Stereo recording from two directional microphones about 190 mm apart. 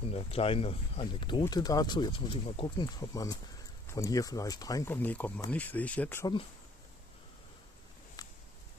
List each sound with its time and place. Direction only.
0.0 s speech: 30° left (ahead or behind); by 6.3 s 10° left (ahead or behind)